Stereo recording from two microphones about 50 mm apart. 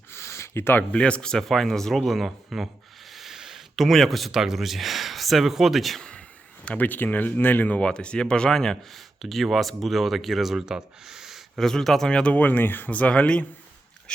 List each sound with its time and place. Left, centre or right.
0.1 s a sound: left
0.9 s speech: left; by 2.7 s centre
3.1 s a sound: centre
4.3 s speech: centre
6.0 s a sound: left
6.7 s speech: left; by 11.6 s centre
11.6 s speech: centre
12.0 s speech: centre
12.3 s speech: left